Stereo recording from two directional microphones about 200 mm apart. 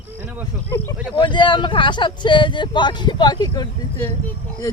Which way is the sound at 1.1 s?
25° left (ahead or behind).